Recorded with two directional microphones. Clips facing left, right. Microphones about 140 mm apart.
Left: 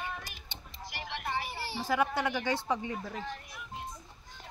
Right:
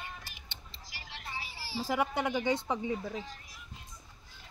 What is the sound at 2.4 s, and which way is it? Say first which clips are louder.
Speech: right 2 dB; 65° left (ahead or behind).